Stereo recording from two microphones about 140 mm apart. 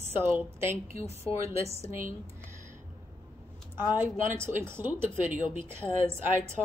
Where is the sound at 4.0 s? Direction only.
20° right (ahead or behind).